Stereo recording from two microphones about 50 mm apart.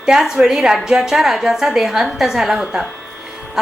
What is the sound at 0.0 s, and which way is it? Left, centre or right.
A woman's voice, centre.